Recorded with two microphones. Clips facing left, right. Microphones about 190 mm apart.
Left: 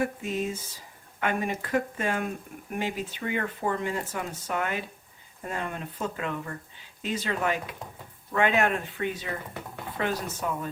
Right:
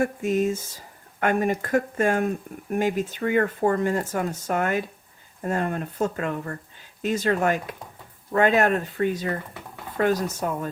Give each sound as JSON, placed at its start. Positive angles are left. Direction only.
{"t": 0.0, "sound": "speech", "side_deg": -45}